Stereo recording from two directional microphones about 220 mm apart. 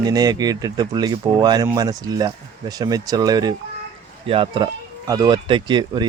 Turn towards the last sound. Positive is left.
turn(degrees=-20)  # may be behind; listen again after turning